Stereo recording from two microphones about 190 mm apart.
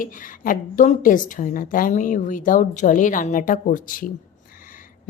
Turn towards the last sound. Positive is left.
turn(degrees=45)  # may be behind; listen again after turning